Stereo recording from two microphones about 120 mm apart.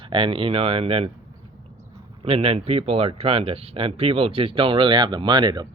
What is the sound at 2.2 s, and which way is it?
Speech, 50° right (ahead or behind).